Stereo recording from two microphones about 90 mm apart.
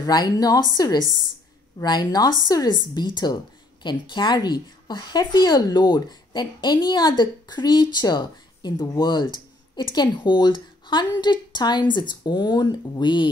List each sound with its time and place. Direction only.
0.0 s a woman's voice: 45° left (ahead or behind)